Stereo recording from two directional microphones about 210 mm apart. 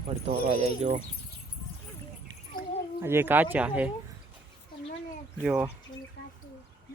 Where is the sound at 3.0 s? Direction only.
10° right (ahead or behind).